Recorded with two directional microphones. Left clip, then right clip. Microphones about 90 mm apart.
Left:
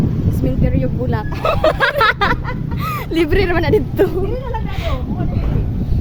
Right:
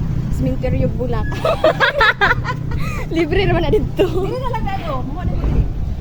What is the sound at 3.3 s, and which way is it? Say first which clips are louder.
Speech: left 1 dB; 90° left.